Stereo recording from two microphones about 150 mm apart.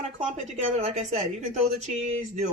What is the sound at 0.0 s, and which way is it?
Speech, 50° right (ahead or behind).